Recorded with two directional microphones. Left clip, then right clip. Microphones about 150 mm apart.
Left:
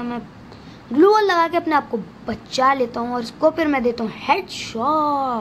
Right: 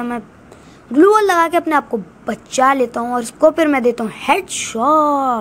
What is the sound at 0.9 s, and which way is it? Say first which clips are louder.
A woman's voice: right 3 dB; 15° right (ahead or behind).